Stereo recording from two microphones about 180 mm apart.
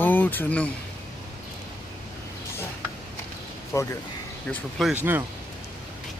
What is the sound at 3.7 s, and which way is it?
Speech, 15° left (ahead or behind).